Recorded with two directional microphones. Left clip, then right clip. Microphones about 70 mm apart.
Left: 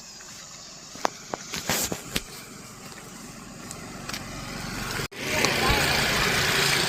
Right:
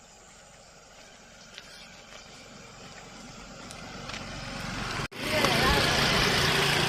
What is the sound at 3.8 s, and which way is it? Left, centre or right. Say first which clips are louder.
Vehicle: left 3 dB; centre.